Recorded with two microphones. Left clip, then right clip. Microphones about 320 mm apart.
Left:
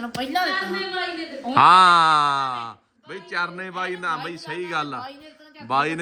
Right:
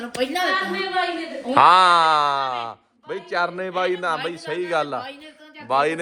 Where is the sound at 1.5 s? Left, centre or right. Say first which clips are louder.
Even; centre.